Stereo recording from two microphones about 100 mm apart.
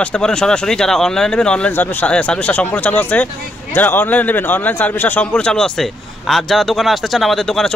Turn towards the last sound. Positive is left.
turn(degrees=5)  # may be behind; listen again after turning